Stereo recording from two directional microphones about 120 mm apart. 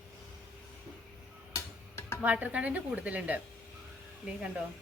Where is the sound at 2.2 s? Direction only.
10° right (ahead or behind).